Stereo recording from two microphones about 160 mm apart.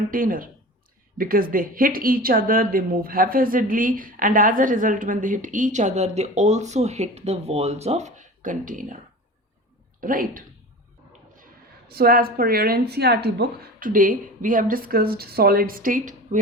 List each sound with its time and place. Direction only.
0.1 s speech: 60° right (ahead or behind)
10.0 s speech: 60° right (ahead or behind)
11.9 s a woman's voice: 70° right (ahead or behind); by 16.4 s 55° right (ahead or behind)